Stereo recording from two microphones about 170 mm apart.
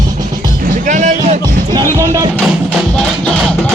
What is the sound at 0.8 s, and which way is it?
Speech, 50° right (ahead or behind).